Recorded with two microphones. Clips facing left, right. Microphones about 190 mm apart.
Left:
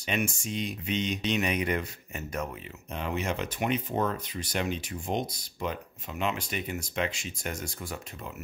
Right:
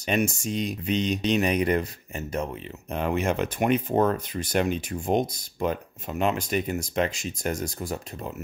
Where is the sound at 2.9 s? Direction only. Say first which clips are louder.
Right 6 dB; 55° right (ahead or behind).